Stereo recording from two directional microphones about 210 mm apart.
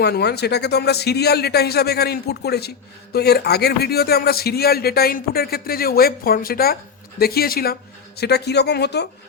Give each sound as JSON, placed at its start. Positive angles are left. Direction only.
{"t": 0.0, "sound": "speech", "side_deg": 50}